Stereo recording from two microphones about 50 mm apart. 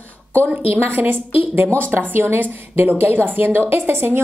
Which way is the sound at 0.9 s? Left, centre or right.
Right.